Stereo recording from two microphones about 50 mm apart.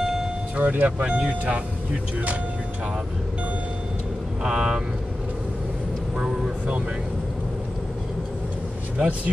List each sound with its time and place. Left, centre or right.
0.0 s music: centre
0.6 s speech: right
4.4 s speech: centre
8.9 s speech: right